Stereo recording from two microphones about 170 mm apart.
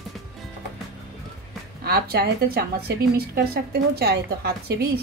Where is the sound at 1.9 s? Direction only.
65° right (ahead or behind).